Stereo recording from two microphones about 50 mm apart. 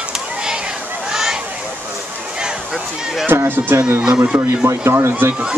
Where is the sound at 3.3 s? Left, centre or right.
Right.